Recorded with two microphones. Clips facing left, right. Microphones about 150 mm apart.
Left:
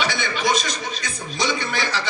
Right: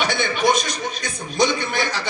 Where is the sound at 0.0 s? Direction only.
50° right (ahead or behind).